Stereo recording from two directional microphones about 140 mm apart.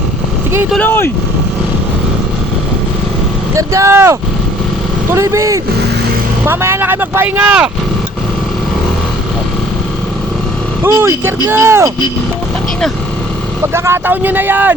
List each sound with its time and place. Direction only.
0.8 s speech: 15° left (ahead or behind)
3.5 s speech: 20° right (ahead or behind)
10.8 s speech: 20° right (ahead or behind)
13.7 s speech: 20° right (ahead or behind)